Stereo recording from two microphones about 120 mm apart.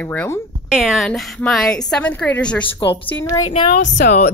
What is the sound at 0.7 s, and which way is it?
A woman's voice, 5° right (ahead or behind).